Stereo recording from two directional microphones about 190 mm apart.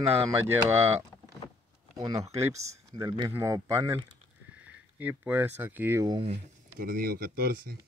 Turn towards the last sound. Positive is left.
turn(degrees=-55)  # may be behind; listen again after turning